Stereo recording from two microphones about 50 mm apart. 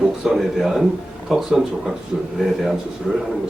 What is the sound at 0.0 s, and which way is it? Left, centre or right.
A man's voice, centre.